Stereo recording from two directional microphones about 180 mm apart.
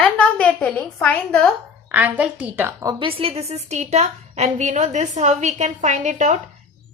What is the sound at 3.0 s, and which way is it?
A woman's voice, 30° right (ahead or behind).